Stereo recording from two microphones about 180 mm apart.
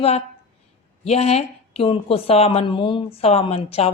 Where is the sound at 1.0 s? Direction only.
35° left (ahead or behind).